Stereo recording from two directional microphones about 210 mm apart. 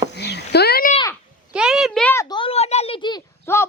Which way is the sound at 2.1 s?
15° left (ahead or behind).